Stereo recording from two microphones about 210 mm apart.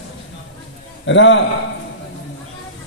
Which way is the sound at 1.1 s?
60° left (ahead or behind).